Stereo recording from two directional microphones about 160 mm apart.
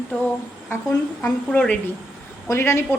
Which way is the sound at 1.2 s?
5° left (ahead or behind).